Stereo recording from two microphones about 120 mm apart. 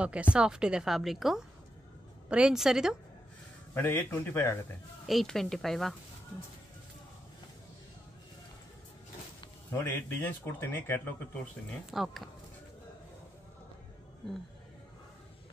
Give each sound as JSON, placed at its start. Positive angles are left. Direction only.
{"t": 0.0, "sound": "a woman's voice", "side_deg": -10}
{"t": 3.7, "sound": "speech", "side_deg": 15}
{"t": 5.0, "sound": "speech", "side_deg": 0}
{"t": 9.7, "sound": "speech", "side_deg": 20}
{"t": 11.9, "sound": "speech", "side_deg": 0}